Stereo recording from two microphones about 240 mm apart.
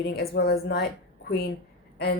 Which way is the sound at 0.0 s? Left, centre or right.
Left.